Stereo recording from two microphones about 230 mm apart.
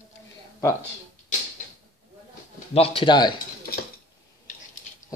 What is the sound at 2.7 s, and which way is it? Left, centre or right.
Speech, left.